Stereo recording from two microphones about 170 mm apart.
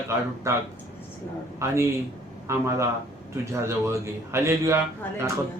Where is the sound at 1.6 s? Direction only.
15° right (ahead or behind).